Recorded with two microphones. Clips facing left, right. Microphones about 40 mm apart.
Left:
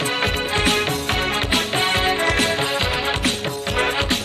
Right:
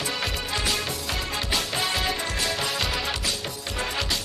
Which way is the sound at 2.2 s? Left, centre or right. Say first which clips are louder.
Left 9 dB; left.